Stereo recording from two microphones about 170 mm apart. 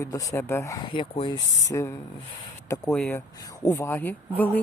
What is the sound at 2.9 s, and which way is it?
Speech, 5° left (ahead or behind).